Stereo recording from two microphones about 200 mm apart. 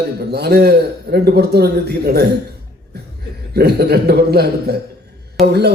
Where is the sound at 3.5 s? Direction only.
55° right (ahead or behind).